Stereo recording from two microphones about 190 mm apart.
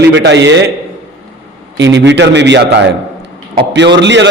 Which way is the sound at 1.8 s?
70° right (ahead or behind).